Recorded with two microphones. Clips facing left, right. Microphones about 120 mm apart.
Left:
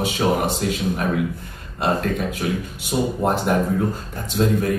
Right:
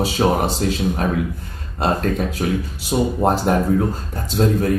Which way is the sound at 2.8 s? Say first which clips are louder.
Right 3 dB; 30° right (ahead or behind).